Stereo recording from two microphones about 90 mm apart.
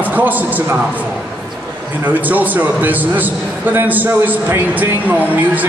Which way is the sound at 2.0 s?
20° right (ahead or behind).